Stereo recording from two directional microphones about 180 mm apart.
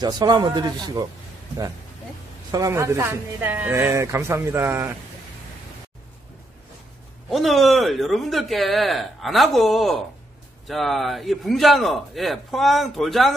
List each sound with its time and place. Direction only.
0.0 s a man's voice: 25° right (ahead or behind)
2.5 s speech: 20° right (ahead or behind)
7.2 s speech: centre (ahead or behind)